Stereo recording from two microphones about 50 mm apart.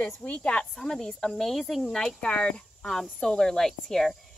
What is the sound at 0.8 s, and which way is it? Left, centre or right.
Speech, centre.